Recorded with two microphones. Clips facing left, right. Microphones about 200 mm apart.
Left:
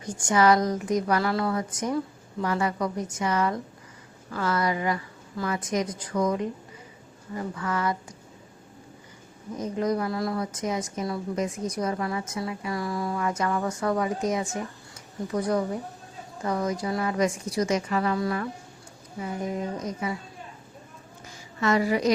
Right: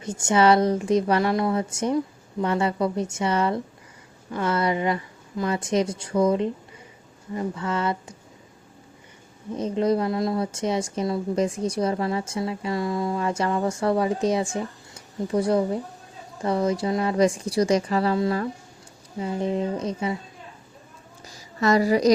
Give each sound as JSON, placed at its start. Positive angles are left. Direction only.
{"t": 0.0, "sound": "a woman's voice", "side_deg": -25}
{"t": 9.6, "sound": "a woman's voice", "side_deg": -30}
{"t": 21.2, "sound": "a sound", "side_deg": -35}